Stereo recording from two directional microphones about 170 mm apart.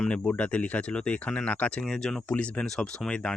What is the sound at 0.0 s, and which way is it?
Speech, 5° left (ahead or behind).